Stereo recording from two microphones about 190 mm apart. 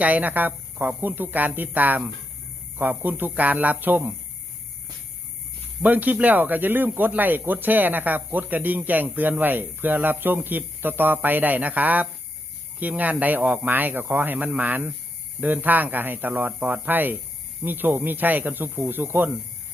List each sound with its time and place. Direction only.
0.0 s speech: 10° right (ahead or behind)
5.8 s speech: 10° right (ahead or behind)